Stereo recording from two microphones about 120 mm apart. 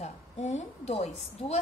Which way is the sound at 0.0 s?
70° left (ahead or behind).